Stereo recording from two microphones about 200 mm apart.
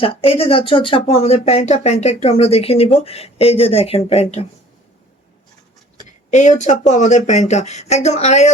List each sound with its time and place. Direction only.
0.0 s speech: 30° left (ahead or behind)
6.3 s speech: 35° left (ahead or behind)